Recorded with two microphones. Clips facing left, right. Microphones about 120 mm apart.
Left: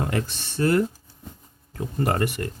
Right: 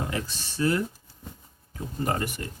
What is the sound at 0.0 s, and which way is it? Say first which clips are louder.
Speech: left 5 dB; 55° left (ahead or behind).